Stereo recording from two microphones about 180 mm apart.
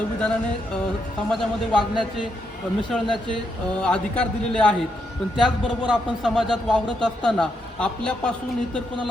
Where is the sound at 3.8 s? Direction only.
5° left (ahead or behind).